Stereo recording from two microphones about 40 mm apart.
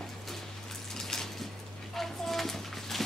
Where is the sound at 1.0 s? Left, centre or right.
Centre.